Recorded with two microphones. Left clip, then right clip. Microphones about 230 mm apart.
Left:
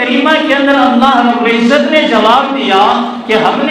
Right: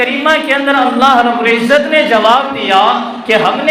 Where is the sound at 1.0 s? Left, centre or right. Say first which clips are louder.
Even; right.